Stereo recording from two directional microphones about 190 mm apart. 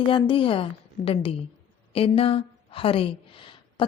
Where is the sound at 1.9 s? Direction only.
30° left (ahead or behind).